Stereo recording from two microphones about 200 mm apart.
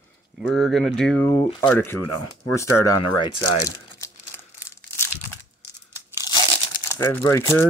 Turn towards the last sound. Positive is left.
turn(degrees=15)  # may be behind; listen again after turning